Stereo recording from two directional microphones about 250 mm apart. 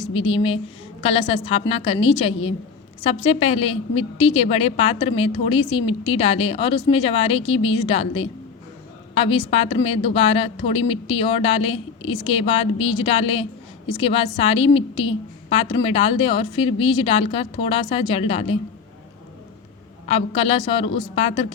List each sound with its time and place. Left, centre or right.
0.0 s a woman's voice: left
20.1 s a woman's voice: left